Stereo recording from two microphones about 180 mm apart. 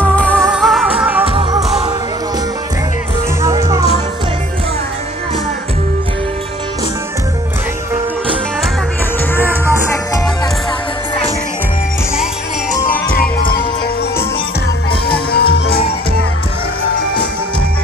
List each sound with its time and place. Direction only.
0.0 s music: 5° left (ahead or behind)
1.2 s music: 30° right (ahead or behind)
3.4 s music: 20° right (ahead or behind)
13.2 s music: 55° left (ahead or behind)
15.3 s music: 65° left (ahead or behind)